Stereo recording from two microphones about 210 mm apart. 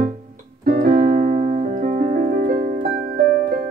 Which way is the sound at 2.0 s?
40° right (ahead or behind).